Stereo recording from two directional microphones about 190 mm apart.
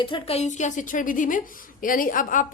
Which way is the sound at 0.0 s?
30° left (ahead or behind).